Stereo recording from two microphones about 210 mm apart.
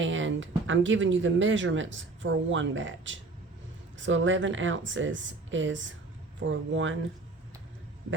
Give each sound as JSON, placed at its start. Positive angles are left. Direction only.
{"t": 0.0, "sound": "speech", "side_deg": -65}